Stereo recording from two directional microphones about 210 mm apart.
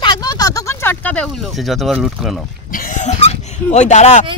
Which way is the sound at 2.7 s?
40° left (ahead or behind).